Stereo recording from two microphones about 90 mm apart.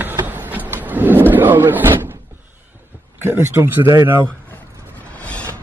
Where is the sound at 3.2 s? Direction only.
25° right (ahead or behind).